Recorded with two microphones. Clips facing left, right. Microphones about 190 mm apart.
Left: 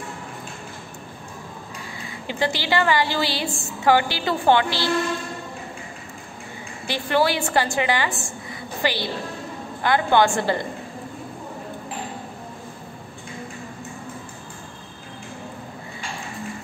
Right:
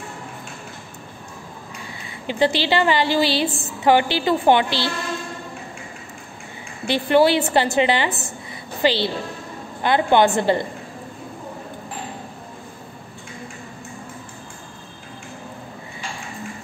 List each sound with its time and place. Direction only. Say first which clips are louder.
2.2 s a woman's voice: right 5 dB; 20° right (ahead or behind)
6.9 s a woman's voice: right 5 dB; 20° right (ahead or behind)